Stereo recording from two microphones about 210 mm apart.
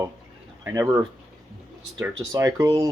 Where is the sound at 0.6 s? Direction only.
15° right (ahead or behind).